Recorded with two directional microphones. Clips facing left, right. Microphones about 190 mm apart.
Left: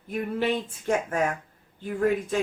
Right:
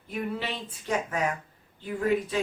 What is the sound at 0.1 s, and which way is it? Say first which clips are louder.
A woman's voice: left 6 dB; 50° left (ahead or behind).